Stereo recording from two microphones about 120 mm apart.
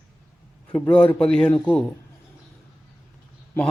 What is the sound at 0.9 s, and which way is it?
Speech, 10° left (ahead or behind).